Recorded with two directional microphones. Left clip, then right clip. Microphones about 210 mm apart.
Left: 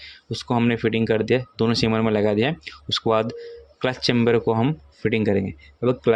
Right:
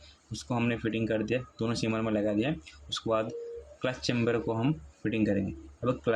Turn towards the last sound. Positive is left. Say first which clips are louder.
# left 10 dB
turn(degrees=35)  # may be behind; listen again after turning